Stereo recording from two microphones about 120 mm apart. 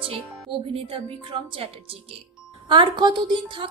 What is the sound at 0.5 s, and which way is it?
A woman's voice, 50° right (ahead or behind).